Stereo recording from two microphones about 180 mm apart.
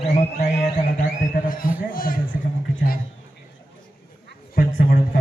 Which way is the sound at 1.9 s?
50° left (ahead or behind).